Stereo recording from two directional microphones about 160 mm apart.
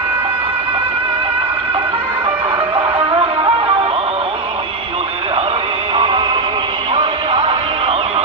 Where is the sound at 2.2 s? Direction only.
35° right (ahead or behind).